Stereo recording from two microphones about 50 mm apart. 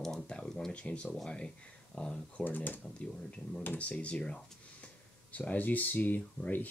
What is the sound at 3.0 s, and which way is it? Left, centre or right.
Speech, centre.